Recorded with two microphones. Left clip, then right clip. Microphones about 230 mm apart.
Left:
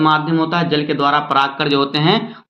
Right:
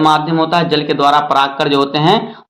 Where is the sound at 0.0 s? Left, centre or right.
Centre.